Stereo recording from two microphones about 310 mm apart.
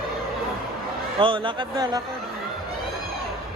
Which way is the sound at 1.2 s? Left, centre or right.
Centre.